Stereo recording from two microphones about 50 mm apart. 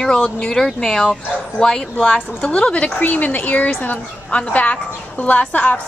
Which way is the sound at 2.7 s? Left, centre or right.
Left.